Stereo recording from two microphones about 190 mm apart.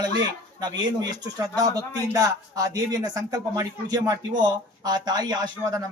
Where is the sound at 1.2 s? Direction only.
20° right (ahead or behind).